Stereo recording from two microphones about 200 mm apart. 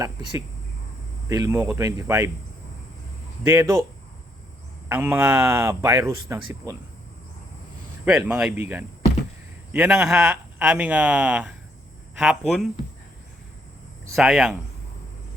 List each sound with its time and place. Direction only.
0.0 s speech: 20° right (ahead or behind)
3.4 s speech: 10° right (ahead or behind)
4.9 s speech: 10° right (ahead or behind)
8.3 s speech: 5° right (ahead or behind)
14.2 s speech: 5° right (ahead or behind)